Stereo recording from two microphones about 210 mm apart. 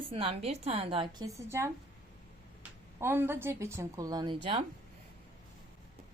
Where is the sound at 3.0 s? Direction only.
10° right (ahead or behind).